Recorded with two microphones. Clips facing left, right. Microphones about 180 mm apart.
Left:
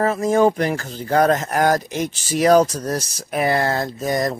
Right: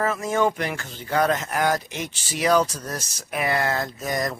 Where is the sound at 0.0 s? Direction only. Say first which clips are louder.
Left 6 dB; 35° left (ahead or behind).